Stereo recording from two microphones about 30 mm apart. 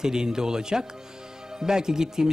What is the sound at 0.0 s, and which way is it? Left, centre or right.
Speech, right.